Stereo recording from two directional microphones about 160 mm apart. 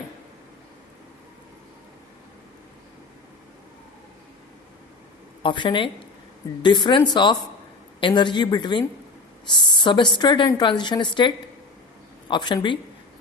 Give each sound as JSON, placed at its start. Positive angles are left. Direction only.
{"t": 5.4, "sound": "a woman's voice", "side_deg": 30}
{"t": 12.3, "sound": "a woman's voice", "side_deg": 30}